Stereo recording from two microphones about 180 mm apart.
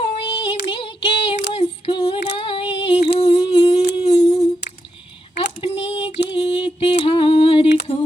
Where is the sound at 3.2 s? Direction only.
25° left (ahead or behind).